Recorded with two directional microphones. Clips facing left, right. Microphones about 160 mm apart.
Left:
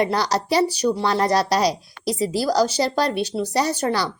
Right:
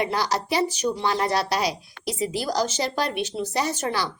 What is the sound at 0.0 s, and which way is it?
Speech, 35° left (ahead or behind).